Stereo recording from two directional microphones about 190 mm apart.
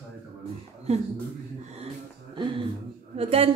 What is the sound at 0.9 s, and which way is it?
Speech, 35° right (ahead or behind).